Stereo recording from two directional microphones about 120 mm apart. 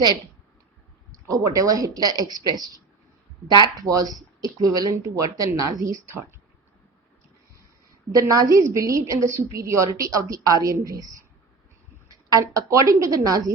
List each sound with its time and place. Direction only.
1.3 s a woman's voice: 30° right (ahead or behind)
8.1 s a woman's voice: 30° right (ahead or behind)